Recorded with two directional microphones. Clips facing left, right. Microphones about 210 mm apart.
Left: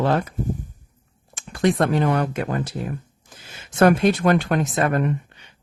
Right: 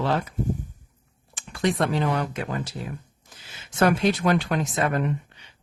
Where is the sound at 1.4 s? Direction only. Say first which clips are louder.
Left 4 dB; 45° left (ahead or behind).